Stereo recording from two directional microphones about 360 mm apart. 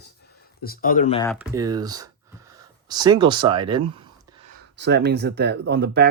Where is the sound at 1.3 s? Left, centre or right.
Centre.